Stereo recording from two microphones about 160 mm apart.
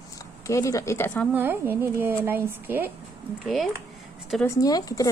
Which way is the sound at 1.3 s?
15° right (ahead or behind).